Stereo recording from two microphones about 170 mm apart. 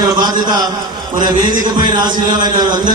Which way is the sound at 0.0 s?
25° right (ahead or behind).